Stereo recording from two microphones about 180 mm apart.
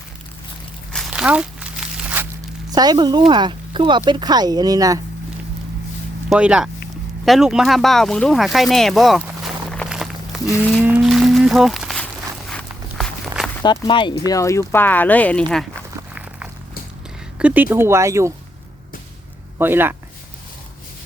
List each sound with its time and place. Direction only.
0.9 s a sound: centre (ahead or behind)
2.6 s speech: 20° right (ahead or behind)
6.3 s speech: 5° right (ahead or behind)
9.6 s walk: centre (ahead or behind)
10.8 s a sound: 5° right (ahead or behind)
12.5 s walk: centre (ahead or behind)
13.6 s speech: 25° left (ahead or behind); by 15.6 s 5° left (ahead or behind)
17.4 s speech: 10° right (ahead or behind)
19.5 s speech: 10° right (ahead or behind)